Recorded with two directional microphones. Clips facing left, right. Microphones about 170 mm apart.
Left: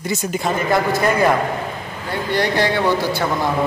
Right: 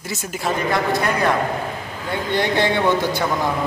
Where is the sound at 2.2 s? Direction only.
20° right (ahead or behind).